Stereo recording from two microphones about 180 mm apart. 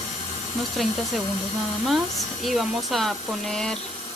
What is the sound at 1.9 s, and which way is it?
Speech, centre (ahead or behind).